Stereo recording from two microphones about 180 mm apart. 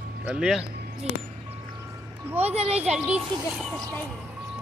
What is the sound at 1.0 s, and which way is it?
Speech, 35° right (ahead or behind).